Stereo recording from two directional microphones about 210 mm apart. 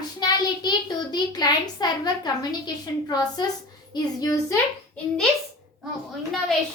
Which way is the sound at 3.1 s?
20° left (ahead or behind).